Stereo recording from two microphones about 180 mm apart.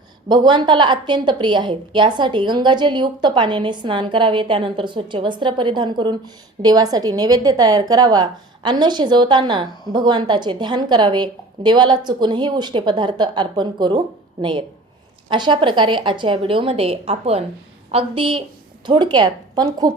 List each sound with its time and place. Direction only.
0.3 s a woman's voice: 25° right (ahead or behind)
15.3 s a woman's voice: 25° right (ahead or behind)